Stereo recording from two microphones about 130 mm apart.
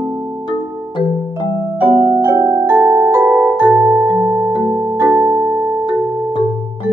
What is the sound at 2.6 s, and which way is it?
Music, 25° right (ahead or behind).